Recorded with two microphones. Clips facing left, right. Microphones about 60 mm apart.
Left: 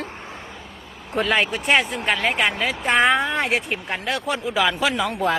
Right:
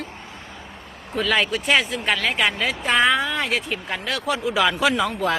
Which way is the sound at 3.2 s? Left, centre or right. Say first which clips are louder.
Left 2 dB; left.